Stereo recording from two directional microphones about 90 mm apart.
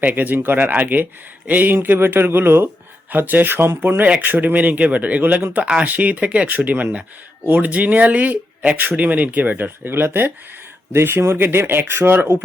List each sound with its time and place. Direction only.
0.0 s speech: 20° right (ahead or behind)